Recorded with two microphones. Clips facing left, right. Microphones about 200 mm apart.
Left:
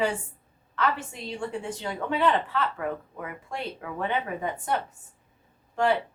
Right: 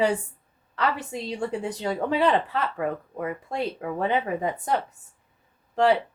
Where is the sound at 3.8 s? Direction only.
35° right (ahead or behind).